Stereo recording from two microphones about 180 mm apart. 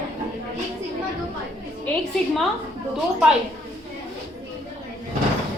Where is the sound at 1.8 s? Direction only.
5° left (ahead or behind).